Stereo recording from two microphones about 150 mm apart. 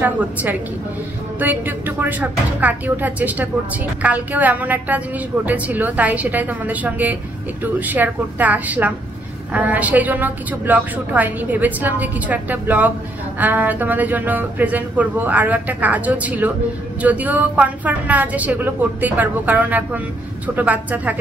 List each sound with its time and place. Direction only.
0.0 s a woman's voice: 10° right (ahead or behind)